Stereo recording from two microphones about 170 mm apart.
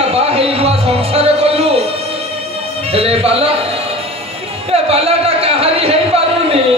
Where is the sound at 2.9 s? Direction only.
35° right (ahead or behind).